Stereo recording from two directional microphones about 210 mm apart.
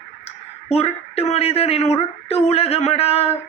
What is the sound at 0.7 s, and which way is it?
Speech, 30° left (ahead or behind).